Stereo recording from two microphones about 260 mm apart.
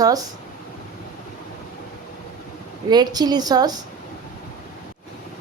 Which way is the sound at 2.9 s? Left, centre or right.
Centre.